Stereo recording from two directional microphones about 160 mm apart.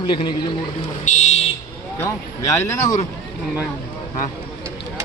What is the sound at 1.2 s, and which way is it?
Fire alarm, 45° left (ahead or behind).